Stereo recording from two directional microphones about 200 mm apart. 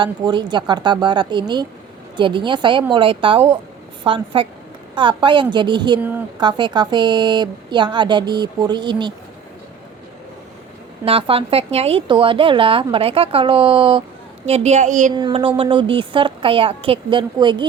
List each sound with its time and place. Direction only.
0.0 s speech: 25° right (ahead or behind)
6.0 s a woman's voice: 10° right (ahead or behind)
6.4 s speech: 20° right (ahead or behind)
11.0 s a woman's voice: 30° right (ahead or behind)
15.1 s speech: 20° right (ahead or behind)